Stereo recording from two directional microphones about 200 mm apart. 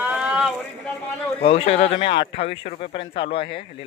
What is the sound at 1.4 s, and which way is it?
Speech, 30° left (ahead or behind).